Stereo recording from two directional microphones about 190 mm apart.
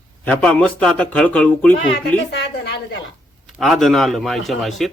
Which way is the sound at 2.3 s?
65° left (ahead or behind).